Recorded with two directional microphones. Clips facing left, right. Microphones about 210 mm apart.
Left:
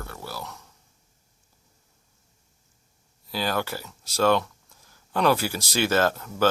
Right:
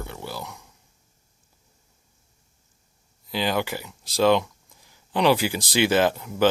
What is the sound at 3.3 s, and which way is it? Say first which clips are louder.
Speech: right 2 dB; 15° right (ahead or behind).